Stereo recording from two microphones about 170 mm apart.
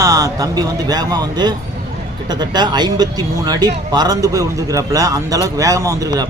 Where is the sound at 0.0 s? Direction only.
20° right (ahead or behind).